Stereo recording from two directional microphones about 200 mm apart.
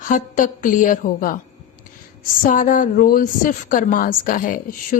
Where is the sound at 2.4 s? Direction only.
40° left (ahead or behind).